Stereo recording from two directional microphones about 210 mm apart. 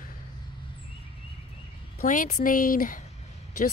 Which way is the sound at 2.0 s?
40° left (ahead or behind).